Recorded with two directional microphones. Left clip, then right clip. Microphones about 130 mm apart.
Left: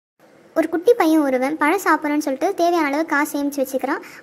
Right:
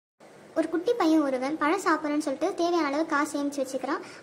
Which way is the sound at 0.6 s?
45° left (ahead or behind).